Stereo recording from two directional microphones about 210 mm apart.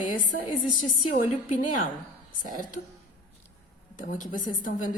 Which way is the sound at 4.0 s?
40° left (ahead or behind).